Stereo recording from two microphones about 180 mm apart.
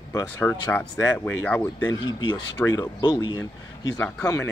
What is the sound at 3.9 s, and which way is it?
Speech, 5° left (ahead or behind).